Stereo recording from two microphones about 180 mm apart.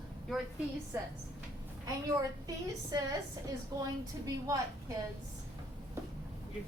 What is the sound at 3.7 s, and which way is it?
A woman's voice, 20° right (ahead or behind).